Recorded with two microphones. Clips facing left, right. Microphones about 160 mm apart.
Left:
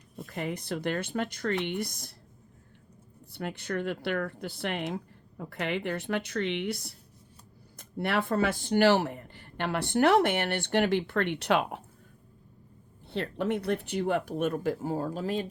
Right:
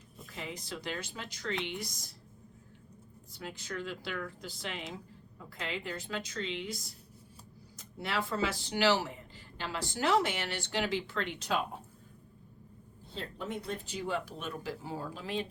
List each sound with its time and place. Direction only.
0.2 s speech: 55° left (ahead or behind)
3.3 s speech: 60° left (ahead or behind)
13.1 s speech: 75° left (ahead or behind); by 15.4 s 45° left (ahead or behind)